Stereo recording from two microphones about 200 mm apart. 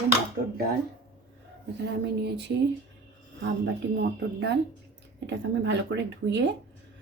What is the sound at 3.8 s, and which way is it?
Speech, 60° right (ahead or behind).